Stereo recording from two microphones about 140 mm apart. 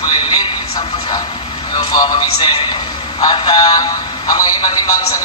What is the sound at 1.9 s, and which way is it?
A man's voice, 30° left (ahead or behind).